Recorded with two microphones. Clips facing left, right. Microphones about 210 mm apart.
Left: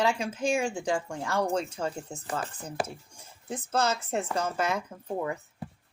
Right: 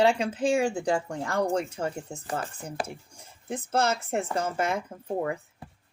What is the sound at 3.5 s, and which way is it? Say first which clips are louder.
Speech: right 2 dB; 60° right (ahead or behind).